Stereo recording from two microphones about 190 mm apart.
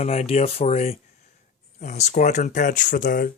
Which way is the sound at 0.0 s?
35° left (ahead or behind).